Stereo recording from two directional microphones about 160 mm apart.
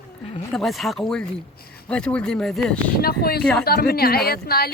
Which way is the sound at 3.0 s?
70° left (ahead or behind).